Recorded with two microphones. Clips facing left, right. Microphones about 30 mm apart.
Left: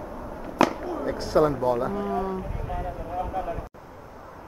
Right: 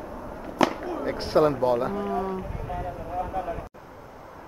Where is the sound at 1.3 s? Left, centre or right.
Centre.